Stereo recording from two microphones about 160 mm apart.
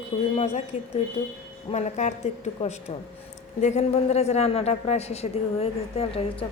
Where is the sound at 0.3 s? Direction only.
45° left (ahead or behind).